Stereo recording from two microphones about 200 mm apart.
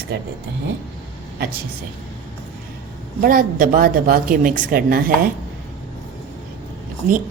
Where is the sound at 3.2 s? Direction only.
45° right (ahead or behind).